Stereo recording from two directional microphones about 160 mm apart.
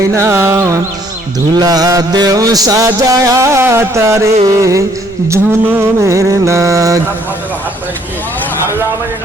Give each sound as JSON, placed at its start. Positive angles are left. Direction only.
{"t": 0.0, "sound": "music", "side_deg": -20}